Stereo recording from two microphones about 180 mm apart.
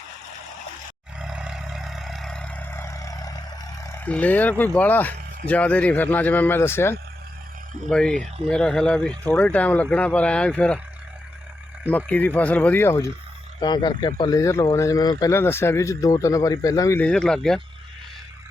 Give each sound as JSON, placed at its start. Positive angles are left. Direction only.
{"t": 1.2, "sound": "vehicle", "side_deg": -5}
{"t": 3.8, "sound": "speech", "side_deg": 10}
{"t": 11.9, "sound": "speech", "side_deg": 10}
{"t": 13.6, "sound": "speech", "side_deg": 25}
{"t": 17.1, "sound": "speech", "side_deg": 5}